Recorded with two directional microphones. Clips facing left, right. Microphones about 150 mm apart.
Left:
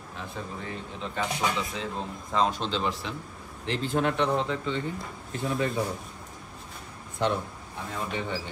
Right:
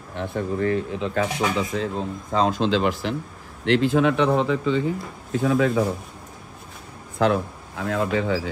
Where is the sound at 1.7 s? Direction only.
40° right (ahead or behind).